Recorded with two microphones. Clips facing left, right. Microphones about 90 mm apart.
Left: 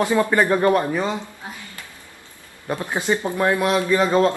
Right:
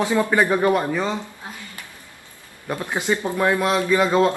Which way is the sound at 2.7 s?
15° left (ahead or behind).